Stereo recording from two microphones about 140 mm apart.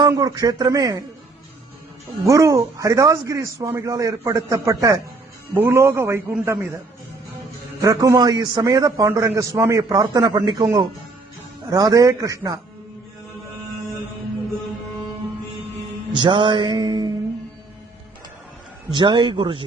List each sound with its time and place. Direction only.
0.1 s a man's voice: 25° right (ahead or behind)
2.2 s a man's voice: 25° right (ahead or behind)
7.8 s a man's voice: 25° right (ahead or behind)
16.1 s music: 35° right (ahead or behind)
18.9 s music: 35° right (ahead or behind)